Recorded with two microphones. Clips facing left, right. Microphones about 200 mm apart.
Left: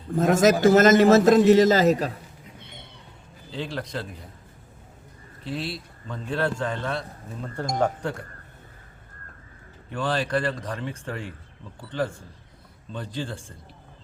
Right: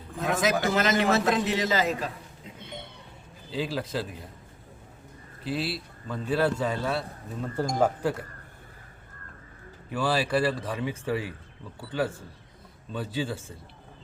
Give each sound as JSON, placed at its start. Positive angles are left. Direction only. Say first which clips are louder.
{"t": 0.1, "sound": "a man's voice", "louder": "left 7 dB", "side_deg": 45}
{"t": 3.5, "sound": "a man's voice", "louder": "right 2 dB", "side_deg": -5}
{"t": 5.4, "sound": "a man's voice", "louder": "right 1 dB", "side_deg": -5}
{"t": 9.9, "sound": "speech", "louder": "even", "side_deg": -5}